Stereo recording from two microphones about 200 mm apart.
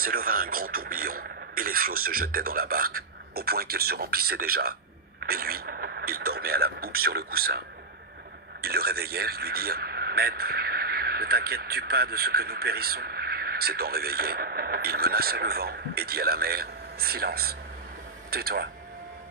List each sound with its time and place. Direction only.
0.0 s speech: 45° right (ahead or behind)